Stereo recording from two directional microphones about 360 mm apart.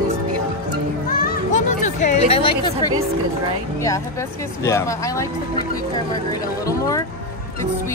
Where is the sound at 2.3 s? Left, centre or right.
Centre.